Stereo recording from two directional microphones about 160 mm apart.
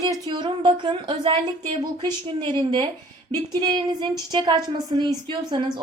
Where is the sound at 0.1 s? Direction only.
25° right (ahead or behind).